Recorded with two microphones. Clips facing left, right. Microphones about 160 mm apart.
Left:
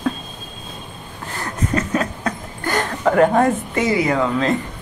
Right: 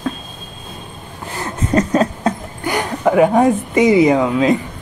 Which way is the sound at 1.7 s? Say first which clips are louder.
Right 8 dB; 35° right (ahead or behind).